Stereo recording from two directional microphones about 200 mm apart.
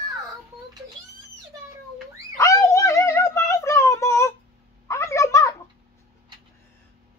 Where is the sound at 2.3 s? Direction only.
15° left (ahead or behind).